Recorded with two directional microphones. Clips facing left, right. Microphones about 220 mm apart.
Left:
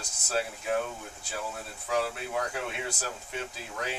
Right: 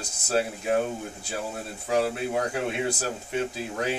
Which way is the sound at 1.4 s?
30° right (ahead or behind).